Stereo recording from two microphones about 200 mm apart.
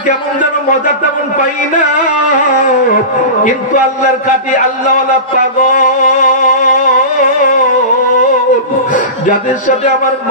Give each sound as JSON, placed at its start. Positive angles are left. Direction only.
{"t": 5.8, "sound": "music", "side_deg": 40}